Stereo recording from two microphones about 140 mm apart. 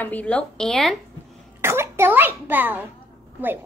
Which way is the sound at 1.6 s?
20° right (ahead or behind).